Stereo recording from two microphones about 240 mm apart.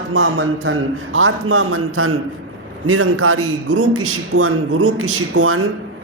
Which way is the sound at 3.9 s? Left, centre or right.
Right.